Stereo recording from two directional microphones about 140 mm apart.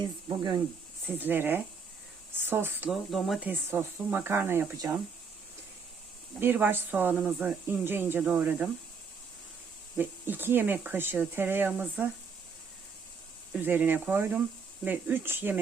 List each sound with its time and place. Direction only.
0.0 s speech: 30° right (ahead or behind)
1.0 s speech: 15° right (ahead or behind)
2.9 s speech: centre (ahead or behind)
3.4 s speech: 15° right (ahead or behind)
6.4 s speech: 15° right (ahead or behind)
10.0 s speech: 15° right (ahead or behind)
13.5 s speech: 15° right (ahead or behind)